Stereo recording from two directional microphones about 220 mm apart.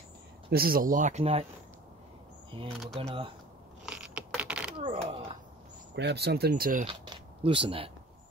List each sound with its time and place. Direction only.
0.5 s speech: 45° right (ahead or behind)
2.7 s speech: centre (ahead or behind)
3.0 s speech: 25° right (ahead or behind)
3.8 s a sound: 5° right (ahead or behind)
4.7 s a sound: 25° right (ahead or behind)
5.9 s speech: 50° right (ahead or behind)
6.9 s speech: 25° right (ahead or behind)